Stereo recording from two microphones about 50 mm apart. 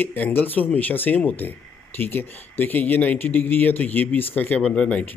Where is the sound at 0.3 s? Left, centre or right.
Left.